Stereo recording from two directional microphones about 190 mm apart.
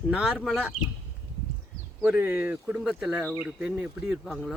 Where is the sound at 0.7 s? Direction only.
35° left (ahead or behind).